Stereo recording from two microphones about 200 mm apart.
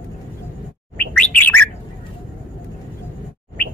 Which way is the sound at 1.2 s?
10° left (ahead or behind).